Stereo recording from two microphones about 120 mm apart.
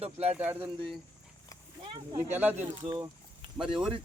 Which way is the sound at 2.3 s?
15° right (ahead or behind).